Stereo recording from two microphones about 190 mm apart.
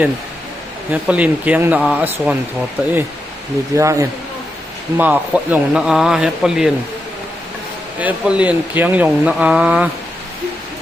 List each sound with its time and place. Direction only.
0.9 s speech: 5° right (ahead or behind)
7.9 s speech: 5° right (ahead or behind)